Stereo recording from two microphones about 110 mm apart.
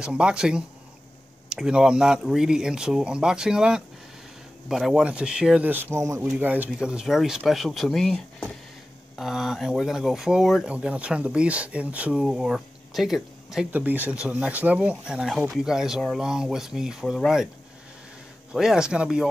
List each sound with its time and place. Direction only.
0.0 s speech: 10° right (ahead or behind); by 6.3 s 30° right (ahead or behind)
6.3 s speech: 15° right (ahead or behind)
13.7 s speech: 15° right (ahead or behind)
18.5 s speech: 5° right (ahead or behind)